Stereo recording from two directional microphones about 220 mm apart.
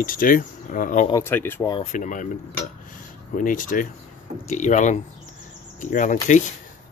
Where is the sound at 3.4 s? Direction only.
40° left (ahead or behind).